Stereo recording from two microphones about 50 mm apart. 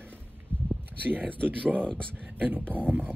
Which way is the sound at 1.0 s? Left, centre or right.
Right.